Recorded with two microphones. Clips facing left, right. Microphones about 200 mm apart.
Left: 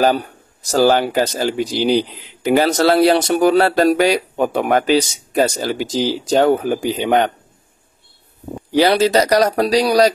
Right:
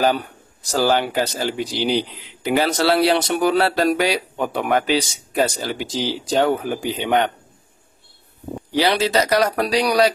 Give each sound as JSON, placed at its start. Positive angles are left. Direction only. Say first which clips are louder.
{"t": 0.0, "sound": "speech", "louder": "left 3 dB", "side_deg": 45}
{"t": 8.7, "sound": "speech", "louder": "left 5 dB", "side_deg": 45}